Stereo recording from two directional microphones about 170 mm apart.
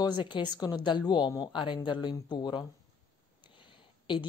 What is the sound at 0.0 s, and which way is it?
Speech, 25° left (ahead or behind).